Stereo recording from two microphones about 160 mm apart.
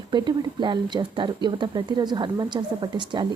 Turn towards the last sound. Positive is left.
turn(degrees=-30)  # may be behind; listen again after turning